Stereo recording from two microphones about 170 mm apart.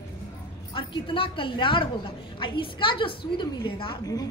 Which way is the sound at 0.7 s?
30° left (ahead or behind).